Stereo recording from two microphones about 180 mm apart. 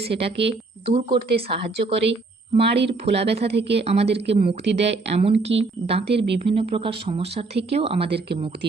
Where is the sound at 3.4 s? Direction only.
70° right (ahead or behind).